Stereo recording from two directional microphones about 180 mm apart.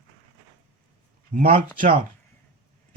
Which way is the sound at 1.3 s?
50° right (ahead or behind).